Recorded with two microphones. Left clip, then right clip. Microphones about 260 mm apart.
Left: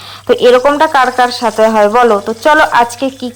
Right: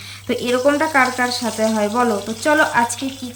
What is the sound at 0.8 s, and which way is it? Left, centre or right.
Speech, left.